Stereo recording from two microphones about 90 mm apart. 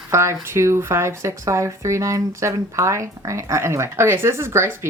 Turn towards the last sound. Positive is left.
turn(degrees=-30)  # may be behind; listen again after turning